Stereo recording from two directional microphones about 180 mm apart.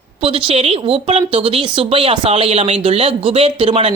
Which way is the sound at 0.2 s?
30° right (ahead or behind).